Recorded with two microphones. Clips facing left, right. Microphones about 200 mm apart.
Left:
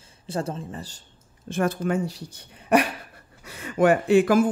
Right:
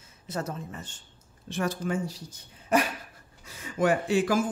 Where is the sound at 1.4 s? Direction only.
55° left (ahead or behind).